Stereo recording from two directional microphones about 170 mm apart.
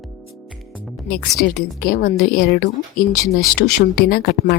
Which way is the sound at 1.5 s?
55° left (ahead or behind).